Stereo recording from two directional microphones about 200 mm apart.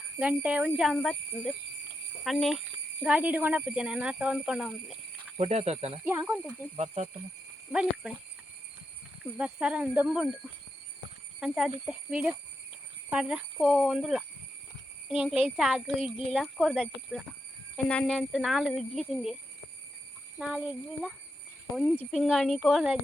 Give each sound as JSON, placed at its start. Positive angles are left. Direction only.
{"t": 0.2, "sound": "speech", "side_deg": -5}
{"t": 5.4, "sound": "speech", "side_deg": -30}
{"t": 6.1, "sound": "speech", "side_deg": -5}
{"t": 6.7, "sound": "speech", "side_deg": -35}
{"t": 7.7, "sound": "speech", "side_deg": -5}
{"t": 9.4, "sound": "speech", "side_deg": -5}
{"t": 11.3, "sound": "speech", "side_deg": -5}
{"t": 20.4, "sound": "speech", "side_deg": 0}